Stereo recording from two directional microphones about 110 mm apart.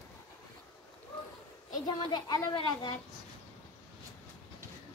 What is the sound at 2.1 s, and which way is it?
Speech, 40° left (ahead or behind).